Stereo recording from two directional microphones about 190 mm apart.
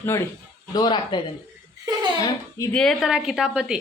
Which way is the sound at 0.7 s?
25° left (ahead or behind).